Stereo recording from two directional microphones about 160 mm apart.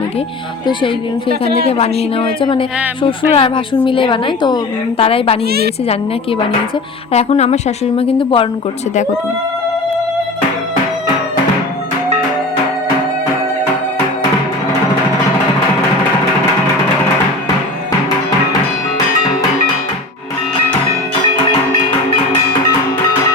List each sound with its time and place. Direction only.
1.3 s speech: 35° left (ahead or behind)
5.5 s a woman's voice: 75° right (ahead or behind)
7.1 s speech: 40° left (ahead or behind)